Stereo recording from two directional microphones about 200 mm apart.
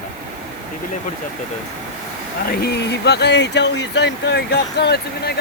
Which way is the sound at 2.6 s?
55° left (ahead or behind).